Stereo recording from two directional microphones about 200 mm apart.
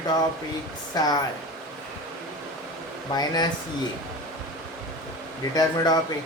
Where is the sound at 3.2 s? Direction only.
20° left (ahead or behind).